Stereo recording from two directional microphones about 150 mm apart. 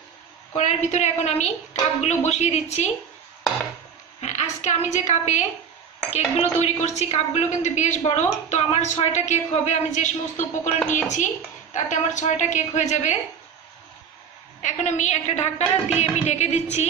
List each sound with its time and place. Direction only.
0.6 s a woman's voice: 50° left (ahead or behind)
4.2 s a sound: 50° left (ahead or behind)
4.9 s a woman's voice: 50° left (ahead or behind)
14.6 s a woman's voice: 50° left (ahead or behind)